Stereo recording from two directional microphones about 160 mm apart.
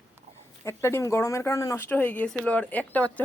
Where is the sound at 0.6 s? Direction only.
15° left (ahead or behind).